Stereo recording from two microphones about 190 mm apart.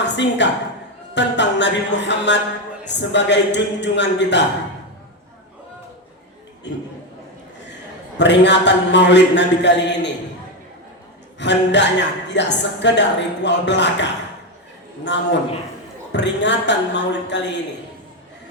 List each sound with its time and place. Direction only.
0.0 s a woman's voice: 70° left (ahead or behind)
6.7 s a woman's voice: 65° left (ahead or behind)
8.2 s a woman's voice: 65° left (ahead or behind)
11.3 s a woman's voice: 65° left (ahead or behind)